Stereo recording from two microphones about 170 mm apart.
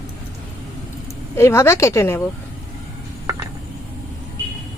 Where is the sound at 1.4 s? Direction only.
15° left (ahead or behind).